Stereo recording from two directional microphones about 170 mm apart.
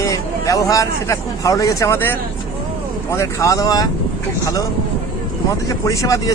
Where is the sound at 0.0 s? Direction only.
20° left (ahead or behind).